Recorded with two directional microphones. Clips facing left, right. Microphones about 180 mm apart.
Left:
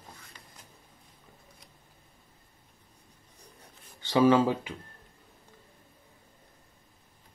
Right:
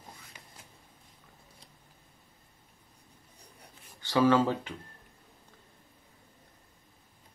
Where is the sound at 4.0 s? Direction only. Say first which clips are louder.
Left 2 dB; 20° left (ahead or behind).